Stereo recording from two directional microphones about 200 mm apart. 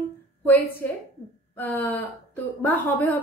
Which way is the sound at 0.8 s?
10° left (ahead or behind).